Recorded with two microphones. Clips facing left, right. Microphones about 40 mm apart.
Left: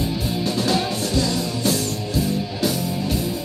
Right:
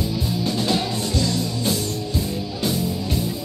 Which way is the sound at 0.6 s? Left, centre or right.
Left.